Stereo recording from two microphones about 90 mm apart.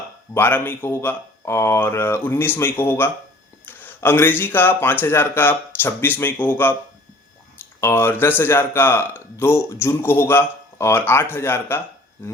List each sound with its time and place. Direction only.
0.3 s speech: 25° left (ahead or behind)
7.8 s speech: 25° left (ahead or behind)